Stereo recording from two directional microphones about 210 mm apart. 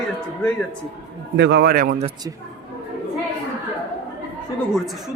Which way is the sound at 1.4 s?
55° right (ahead or behind).